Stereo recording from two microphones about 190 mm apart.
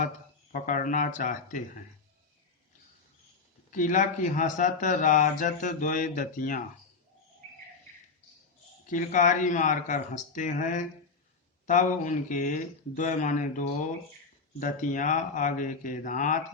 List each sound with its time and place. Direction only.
0.5 s speech: 45° left (ahead or behind)
3.7 s speech: 45° left (ahead or behind)
8.9 s speech: 40° left (ahead or behind)